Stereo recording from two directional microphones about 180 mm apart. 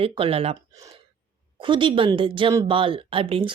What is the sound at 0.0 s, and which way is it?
Speech, 30° right (ahead or behind).